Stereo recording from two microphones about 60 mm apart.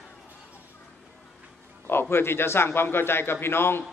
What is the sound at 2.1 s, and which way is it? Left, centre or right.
A man's voice, left.